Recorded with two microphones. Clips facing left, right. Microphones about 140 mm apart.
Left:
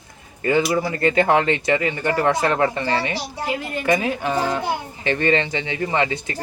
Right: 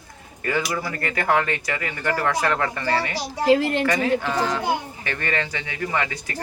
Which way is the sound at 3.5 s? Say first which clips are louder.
Right 10 dB; 85° right.